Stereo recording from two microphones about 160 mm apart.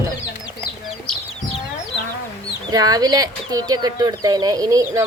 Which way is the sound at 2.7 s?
25° right (ahead or behind).